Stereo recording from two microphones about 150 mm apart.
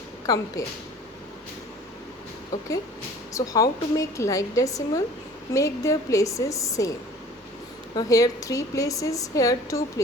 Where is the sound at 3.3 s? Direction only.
20° left (ahead or behind).